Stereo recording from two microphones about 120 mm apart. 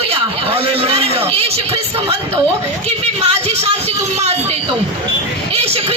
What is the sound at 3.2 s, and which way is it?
Speech, 60° right (ahead or behind).